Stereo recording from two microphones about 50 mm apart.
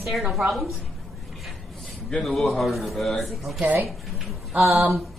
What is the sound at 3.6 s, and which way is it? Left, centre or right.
Speech, right.